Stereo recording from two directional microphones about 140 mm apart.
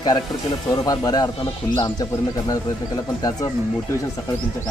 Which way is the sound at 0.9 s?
25° left (ahead or behind).